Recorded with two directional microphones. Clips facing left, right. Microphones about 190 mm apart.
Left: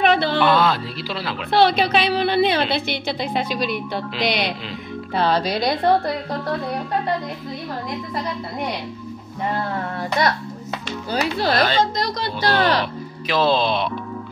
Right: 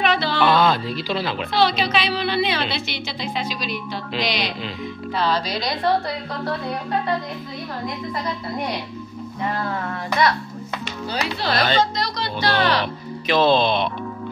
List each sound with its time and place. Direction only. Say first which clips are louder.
0.0 s a sound: left 3 dB; 55° left (ahead or behind)
0.4 s speech: even; centre (ahead or behind)
1.5 s speech: left 4 dB; 55° left (ahead or behind)
11.1 s speech: left 4 dB; 50° left (ahead or behind)
13.3 s speech: right 2 dB; 5° left (ahead or behind)